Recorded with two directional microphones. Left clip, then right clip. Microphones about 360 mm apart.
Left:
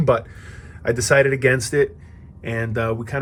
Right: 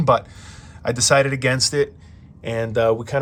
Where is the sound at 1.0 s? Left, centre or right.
Centre.